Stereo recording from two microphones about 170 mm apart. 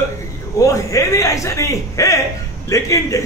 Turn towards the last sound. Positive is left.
turn(degrees=20)  # may be behind; listen again after turning